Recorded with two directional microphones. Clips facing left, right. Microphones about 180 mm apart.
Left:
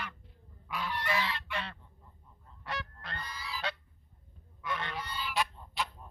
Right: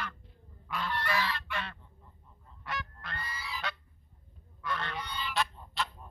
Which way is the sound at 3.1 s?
5° right (ahead or behind).